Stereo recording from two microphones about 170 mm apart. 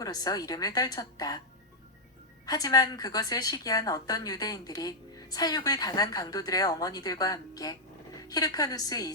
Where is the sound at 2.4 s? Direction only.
20° left (ahead or behind).